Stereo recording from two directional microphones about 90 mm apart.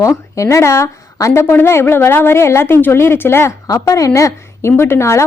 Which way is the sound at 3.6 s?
35° left (ahead or behind).